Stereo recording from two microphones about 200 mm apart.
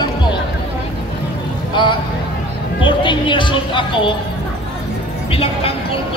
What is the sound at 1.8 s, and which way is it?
Speech, 25° left (ahead or behind).